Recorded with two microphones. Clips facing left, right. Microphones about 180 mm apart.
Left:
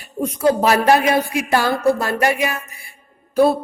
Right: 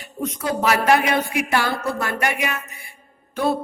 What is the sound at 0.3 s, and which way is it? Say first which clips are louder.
Music: left 6 dB; 30° left (ahead or behind).